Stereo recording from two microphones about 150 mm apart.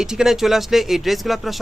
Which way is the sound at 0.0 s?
5° right (ahead or behind).